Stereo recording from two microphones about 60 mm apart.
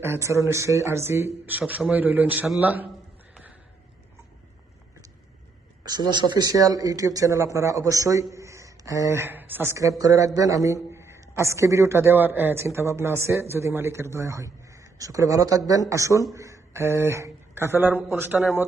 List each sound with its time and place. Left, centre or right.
0.0 s a man's voice: right
1.5 s a man's voice: right
6.4 s a man's voice: right
9.2 s a man's voice: right
10.0 s a man's voice: right
11.2 s a man's voice: right
15.9 s speech: right
17.6 s a man's voice: right